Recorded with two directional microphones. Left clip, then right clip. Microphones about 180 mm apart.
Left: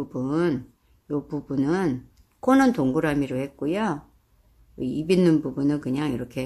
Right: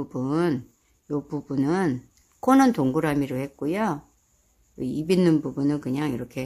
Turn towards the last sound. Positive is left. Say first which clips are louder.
# left 1 dB
turn(degrees=-15)  # may be behind; listen again after turning